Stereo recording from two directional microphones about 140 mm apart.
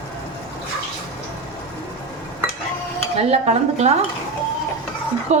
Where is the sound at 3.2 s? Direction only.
50° right (ahead or behind).